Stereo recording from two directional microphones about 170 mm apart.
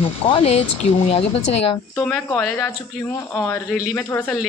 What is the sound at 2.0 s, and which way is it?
A woman's voice, 5° left (ahead or behind).